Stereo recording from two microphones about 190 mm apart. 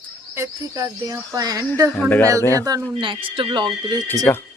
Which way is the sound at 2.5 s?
20° right (ahead or behind).